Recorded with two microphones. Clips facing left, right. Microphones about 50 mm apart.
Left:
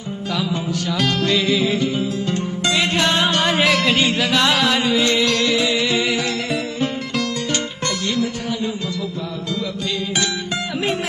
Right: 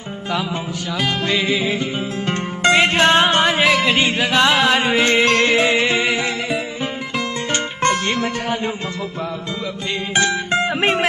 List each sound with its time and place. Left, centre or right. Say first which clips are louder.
0.9 s music: even; centre
2.6 s music: right 6 dB; right
3.4 s music: right 1 dB; centre
3.9 s music: right 1 dB; right
7.5 s music: right 5 dB; right
10.1 s music: right 5 dB; right